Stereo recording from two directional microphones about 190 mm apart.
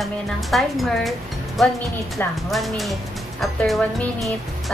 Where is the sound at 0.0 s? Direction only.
Centre (ahead or behind).